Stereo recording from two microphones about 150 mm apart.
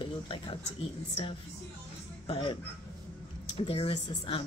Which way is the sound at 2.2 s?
40° left (ahead or behind).